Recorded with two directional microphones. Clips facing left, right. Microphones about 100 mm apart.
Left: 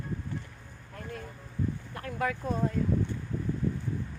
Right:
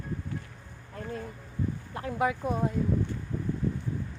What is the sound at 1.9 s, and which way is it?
Speech, 20° right (ahead or behind).